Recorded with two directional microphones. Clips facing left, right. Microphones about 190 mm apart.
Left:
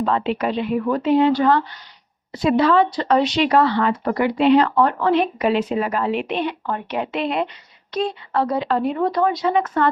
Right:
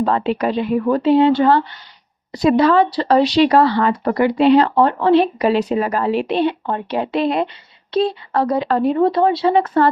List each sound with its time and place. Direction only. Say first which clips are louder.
0.0 s speech: right 3 dB; 40° right (ahead or behind)
2.4 s speech: right 3 dB; 40° right (ahead or behind)